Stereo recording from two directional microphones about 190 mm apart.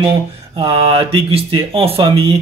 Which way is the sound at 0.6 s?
25° right (ahead or behind).